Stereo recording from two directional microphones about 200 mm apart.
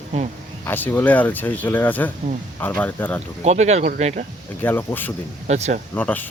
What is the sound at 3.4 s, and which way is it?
Speech, 35° right (ahead or behind).